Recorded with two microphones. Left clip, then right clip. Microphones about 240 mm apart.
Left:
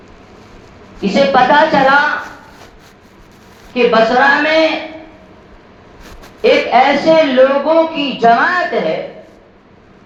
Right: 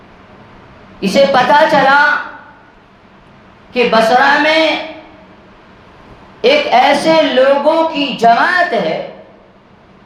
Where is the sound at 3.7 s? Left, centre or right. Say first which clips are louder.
Left 1 dB; right.